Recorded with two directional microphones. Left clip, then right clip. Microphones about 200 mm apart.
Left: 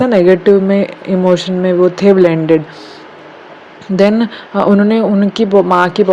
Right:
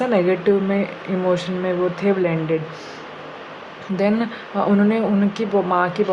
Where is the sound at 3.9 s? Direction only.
35° left (ahead or behind).